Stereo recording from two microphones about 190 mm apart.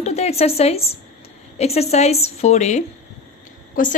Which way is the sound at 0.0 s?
35° left (ahead or behind).